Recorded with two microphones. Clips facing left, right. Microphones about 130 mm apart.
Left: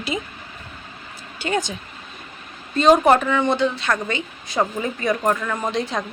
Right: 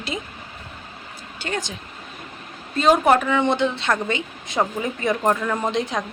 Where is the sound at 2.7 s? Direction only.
5° right (ahead or behind).